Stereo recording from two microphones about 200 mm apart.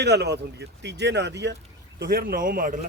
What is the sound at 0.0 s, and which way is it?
Speech, 55° right (ahead or behind).